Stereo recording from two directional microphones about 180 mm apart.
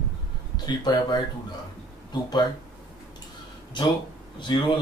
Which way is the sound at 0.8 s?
20° left (ahead or behind).